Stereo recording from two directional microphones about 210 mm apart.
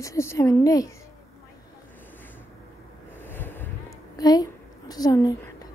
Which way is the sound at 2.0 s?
10° left (ahead or behind).